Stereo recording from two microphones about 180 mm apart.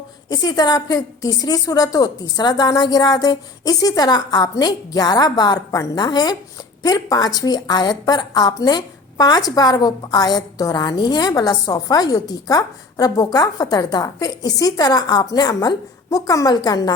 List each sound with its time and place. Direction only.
0.3 s a woman's voice: 20° left (ahead or behind)